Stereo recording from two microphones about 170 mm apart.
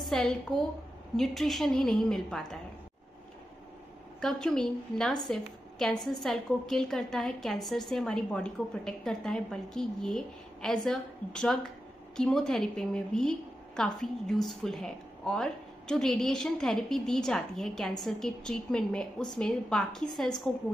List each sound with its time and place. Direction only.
0.0 s a woman's voice: 5° left (ahead or behind)
4.2 s a woman's voice: 5° left (ahead or behind)